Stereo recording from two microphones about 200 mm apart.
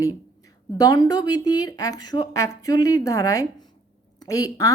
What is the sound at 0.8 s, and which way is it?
A woman's voice, 20° left (ahead or behind).